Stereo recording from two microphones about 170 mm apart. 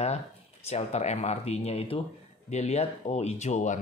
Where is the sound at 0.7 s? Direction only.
40° left (ahead or behind).